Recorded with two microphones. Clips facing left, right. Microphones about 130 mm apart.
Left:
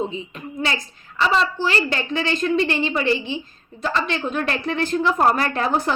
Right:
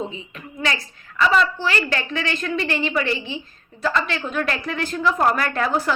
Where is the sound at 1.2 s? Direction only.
30° left (ahead or behind).